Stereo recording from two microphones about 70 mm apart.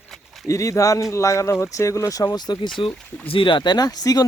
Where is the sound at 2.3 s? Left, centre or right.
Left.